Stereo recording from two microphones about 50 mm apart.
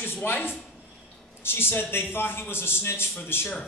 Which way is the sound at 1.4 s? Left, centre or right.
Left.